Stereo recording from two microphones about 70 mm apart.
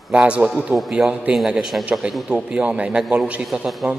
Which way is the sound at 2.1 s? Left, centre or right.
Centre.